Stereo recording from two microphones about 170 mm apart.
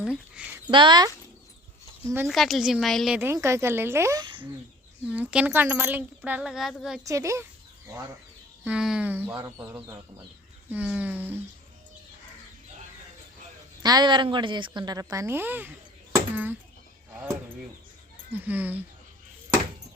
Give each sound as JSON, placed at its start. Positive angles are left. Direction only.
{"t": 0.0, "sound": "speech", "side_deg": -5}
{"t": 0.7, "sound": "a woman's voice", "side_deg": -25}
{"t": 2.2, "sound": "a woman's voice", "side_deg": 0}
{"t": 3.2, "sound": "speech", "side_deg": -15}
{"t": 5.0, "sound": "speech", "side_deg": -10}
{"t": 7.0, "sound": "speech", "side_deg": -20}
{"t": 8.6, "sound": "speech", "side_deg": -5}
{"t": 13.8, "sound": "a woman's voice", "side_deg": -25}
{"t": 18.3, "sound": "speech", "side_deg": -10}